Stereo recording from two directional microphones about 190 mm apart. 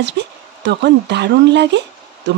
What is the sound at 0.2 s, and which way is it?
Speech, 65° right (ahead or behind).